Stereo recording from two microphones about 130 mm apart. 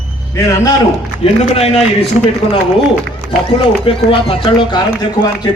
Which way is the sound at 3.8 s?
45° left (ahead or behind).